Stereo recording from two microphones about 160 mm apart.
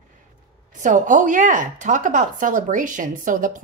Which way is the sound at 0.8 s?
55° right (ahead or behind).